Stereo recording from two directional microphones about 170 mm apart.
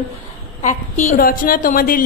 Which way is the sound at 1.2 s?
55° left (ahead or behind).